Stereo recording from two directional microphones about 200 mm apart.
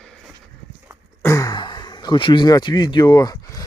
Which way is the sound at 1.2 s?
15° left (ahead or behind).